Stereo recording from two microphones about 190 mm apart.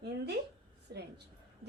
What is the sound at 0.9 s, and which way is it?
Speech, 60° right (ahead or behind).